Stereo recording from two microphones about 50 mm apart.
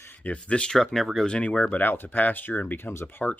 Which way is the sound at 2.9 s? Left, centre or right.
Left.